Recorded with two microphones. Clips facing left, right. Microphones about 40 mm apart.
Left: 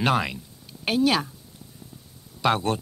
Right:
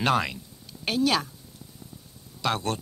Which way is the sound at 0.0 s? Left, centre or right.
Centre.